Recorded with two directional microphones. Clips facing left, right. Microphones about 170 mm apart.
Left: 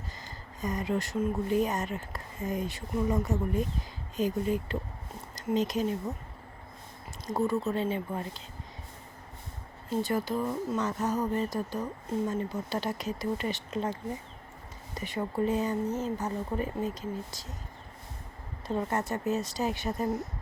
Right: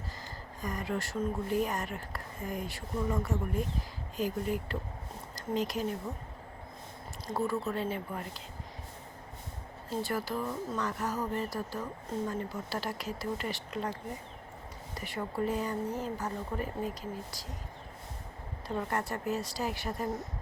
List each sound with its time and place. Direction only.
0.6 s speech: 20° left (ahead or behind)
7.3 s speech: 20° left (ahead or behind)
10.0 s speech: 20° left (ahead or behind)
14.9 s speech: 20° left (ahead or behind)
18.8 s speech: 20° left (ahead or behind)